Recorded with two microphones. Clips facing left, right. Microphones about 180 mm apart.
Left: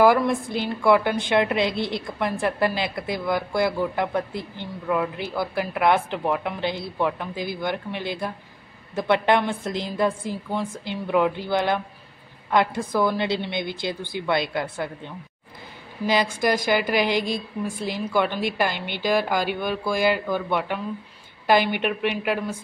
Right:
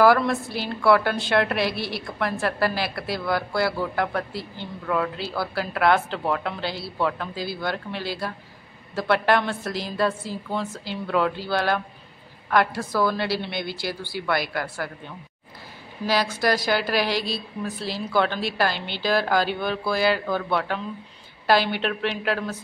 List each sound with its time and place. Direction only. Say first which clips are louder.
0.0 s a woman's voice: even; 15° left (ahead or behind)